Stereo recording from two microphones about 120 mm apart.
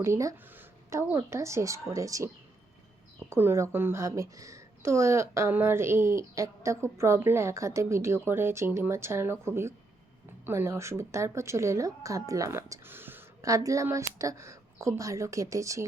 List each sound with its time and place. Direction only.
0.0 s speech: 25° right (ahead or behind)
0.5 s a sound: 25° right (ahead or behind)
1.1 s speech: 25° right (ahead or behind)